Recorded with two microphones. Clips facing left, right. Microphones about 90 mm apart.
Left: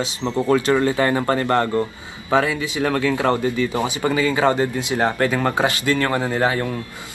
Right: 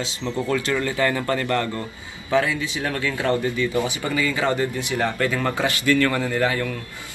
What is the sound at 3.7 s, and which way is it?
Speech, 25° left (ahead or behind).